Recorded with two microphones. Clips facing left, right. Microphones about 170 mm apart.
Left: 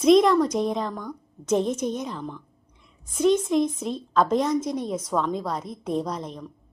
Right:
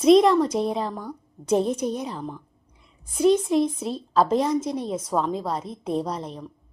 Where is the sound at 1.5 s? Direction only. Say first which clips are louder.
Right 1 dB; 35° right (ahead or behind).